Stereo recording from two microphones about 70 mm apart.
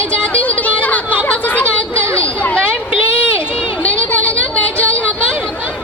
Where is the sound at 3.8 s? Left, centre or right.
Centre.